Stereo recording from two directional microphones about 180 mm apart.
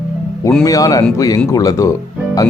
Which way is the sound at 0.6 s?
20° left (ahead or behind).